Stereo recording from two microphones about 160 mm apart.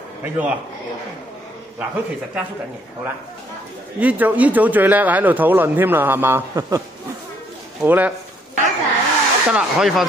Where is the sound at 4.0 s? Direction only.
10° right (ahead or behind).